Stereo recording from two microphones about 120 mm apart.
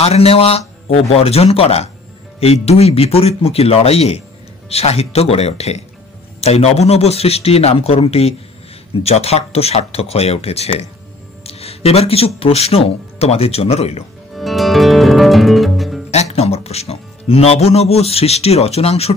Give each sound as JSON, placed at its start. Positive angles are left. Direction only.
{"t": 0.0, "sound": "speech", "side_deg": 55}
{"t": 11.4, "sound": "music", "side_deg": 60}
{"t": 12.4, "sound": "speech", "side_deg": 55}
{"t": 14.3, "sound": "music", "side_deg": 0}
{"t": 16.1, "sound": "speech", "side_deg": 65}